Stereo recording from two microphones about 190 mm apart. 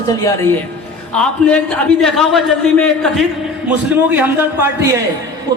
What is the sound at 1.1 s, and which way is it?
A man's voice, 5° left (ahead or behind).